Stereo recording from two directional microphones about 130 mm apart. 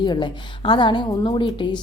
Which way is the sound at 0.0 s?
35° left (ahead or behind).